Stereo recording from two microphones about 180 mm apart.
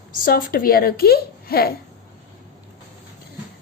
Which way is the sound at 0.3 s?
50° left (ahead or behind).